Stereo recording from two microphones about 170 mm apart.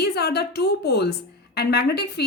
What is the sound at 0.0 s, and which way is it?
A woman's voice, 70° left (ahead or behind).